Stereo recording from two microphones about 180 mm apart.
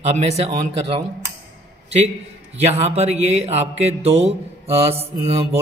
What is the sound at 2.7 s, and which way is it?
Speech, 35° right (ahead or behind).